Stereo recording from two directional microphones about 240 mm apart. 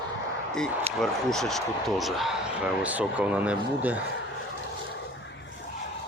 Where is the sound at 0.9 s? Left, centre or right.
Centre.